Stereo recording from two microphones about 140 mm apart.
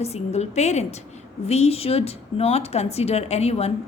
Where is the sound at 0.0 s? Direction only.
50° left (ahead or behind).